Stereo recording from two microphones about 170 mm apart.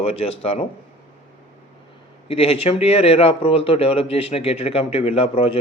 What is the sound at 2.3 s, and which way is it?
Speech, 35° left (ahead or behind).